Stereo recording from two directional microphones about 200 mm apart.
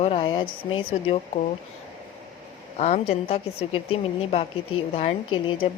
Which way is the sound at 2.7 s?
35° left (ahead or behind).